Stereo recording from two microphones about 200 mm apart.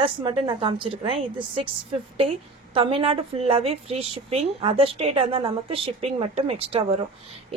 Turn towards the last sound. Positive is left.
turn(degrees=-30)  # may be behind; listen again after turning